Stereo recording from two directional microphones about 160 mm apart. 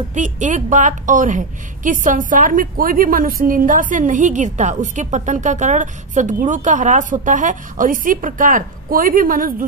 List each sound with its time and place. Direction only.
0.1 s a woman's voice: 50° right (ahead or behind)